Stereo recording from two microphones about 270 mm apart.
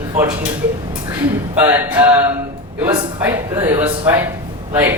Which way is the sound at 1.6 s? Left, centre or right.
Centre.